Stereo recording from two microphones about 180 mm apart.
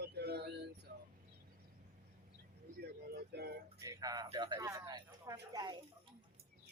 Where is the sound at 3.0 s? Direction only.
60° right (ahead or behind).